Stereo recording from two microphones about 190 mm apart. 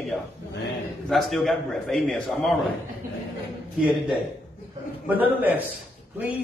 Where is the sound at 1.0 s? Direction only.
Centre (ahead or behind).